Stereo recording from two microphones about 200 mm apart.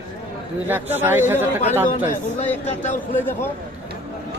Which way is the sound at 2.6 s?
35° left (ahead or behind).